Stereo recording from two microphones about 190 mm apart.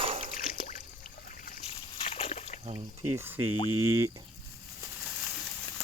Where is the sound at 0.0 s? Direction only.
30° right (ahead or behind).